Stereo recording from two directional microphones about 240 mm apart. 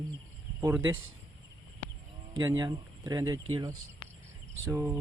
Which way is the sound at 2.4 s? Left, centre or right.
Centre.